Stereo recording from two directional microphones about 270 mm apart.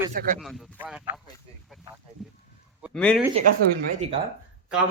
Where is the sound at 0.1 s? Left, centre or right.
Right.